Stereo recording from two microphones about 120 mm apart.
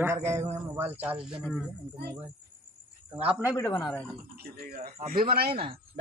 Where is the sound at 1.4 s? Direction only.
Centre (ahead or behind).